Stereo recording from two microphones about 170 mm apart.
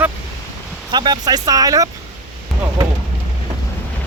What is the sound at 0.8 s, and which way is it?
Speech, 25° right (ahead or behind).